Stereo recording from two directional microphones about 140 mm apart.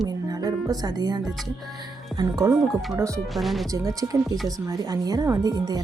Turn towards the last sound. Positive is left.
turn(degrees=-25)  # may be behind; listen again after turning